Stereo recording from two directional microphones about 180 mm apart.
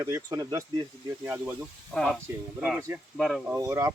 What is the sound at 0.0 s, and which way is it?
Speech, 20° right (ahead or behind).